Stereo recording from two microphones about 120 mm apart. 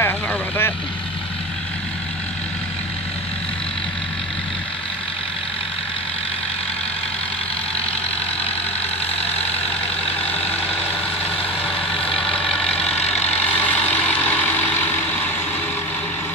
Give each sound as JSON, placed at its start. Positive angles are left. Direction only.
{"t": 0.0, "sound": "vehicle", "side_deg": 20}
{"t": 9.2, "sound": "vehicle", "side_deg": 15}